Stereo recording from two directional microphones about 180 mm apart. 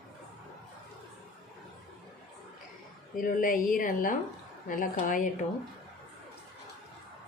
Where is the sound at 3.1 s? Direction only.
50° left (ahead or behind).